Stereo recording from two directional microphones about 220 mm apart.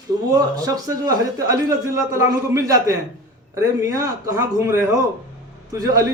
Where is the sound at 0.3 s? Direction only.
15° right (ahead or behind).